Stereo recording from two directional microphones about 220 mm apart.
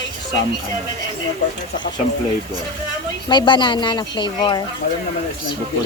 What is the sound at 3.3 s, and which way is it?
A woman's voice, 20° left (ahead or behind).